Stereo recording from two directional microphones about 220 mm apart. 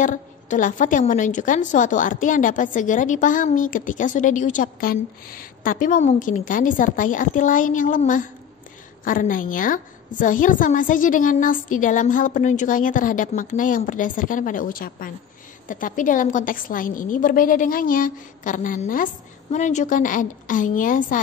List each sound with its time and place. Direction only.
0.0 s a woman's voice: 35° left (ahead or behind)